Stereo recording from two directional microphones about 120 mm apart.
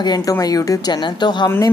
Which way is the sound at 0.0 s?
30° left (ahead or behind).